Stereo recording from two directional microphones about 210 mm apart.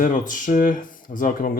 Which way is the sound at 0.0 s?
40° left (ahead or behind).